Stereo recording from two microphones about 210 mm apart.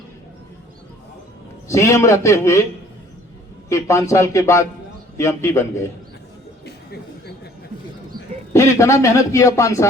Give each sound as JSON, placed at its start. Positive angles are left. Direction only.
{"t": 1.6, "sound": "a man's voice", "side_deg": 15}
{"t": 3.7, "sound": "a man's voice", "side_deg": 15}
{"t": 6.7, "sound": "a sound", "side_deg": 50}
{"t": 8.5, "sound": "a man's voice", "side_deg": 15}